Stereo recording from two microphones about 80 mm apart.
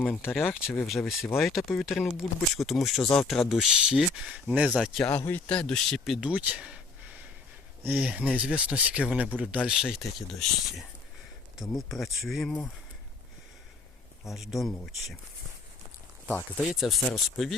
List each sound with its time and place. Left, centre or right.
0.2 s speech: centre
4.7 s speech: centre
5.3 s speech: centre
6.2 s a sound: centre
7.9 s speech: centre
9.6 s speech: centre
14.3 s speech: centre
16.6 s speech: centre